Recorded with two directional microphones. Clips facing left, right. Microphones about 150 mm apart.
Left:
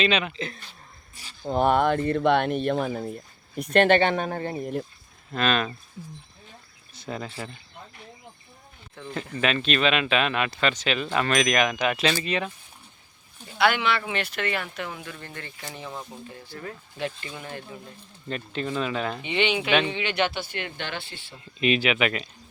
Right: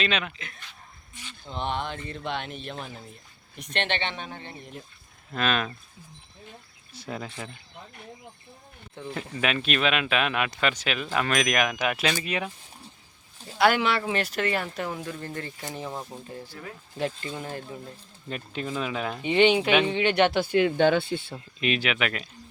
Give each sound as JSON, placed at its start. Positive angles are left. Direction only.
{"t": 0.0, "sound": "speech", "side_deg": 0}
{"t": 0.3, "sound": "speech", "side_deg": 35}
{"t": 5.3, "sound": "speech", "side_deg": -5}
{"t": 6.9, "sound": "speech", "side_deg": -5}
{"t": 9.0, "sound": "speech", "side_deg": -5}
{"t": 13.4, "sound": "speech", "side_deg": -35}
{"t": 16.5, "sound": "speech", "side_deg": -15}
{"t": 17.0, "sound": "speech", "side_deg": -35}
{"t": 18.3, "sound": "speech", "side_deg": -5}
{"t": 19.2, "sound": "speech", "side_deg": -40}
{"t": 21.6, "sound": "speech", "side_deg": 0}